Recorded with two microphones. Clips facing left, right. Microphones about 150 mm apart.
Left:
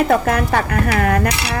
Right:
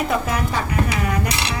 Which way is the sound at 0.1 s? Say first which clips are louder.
Left 6 dB; 60° left (ahead or behind).